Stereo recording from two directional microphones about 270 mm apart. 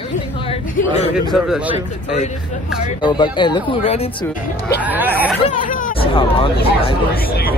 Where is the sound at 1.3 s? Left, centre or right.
Centre.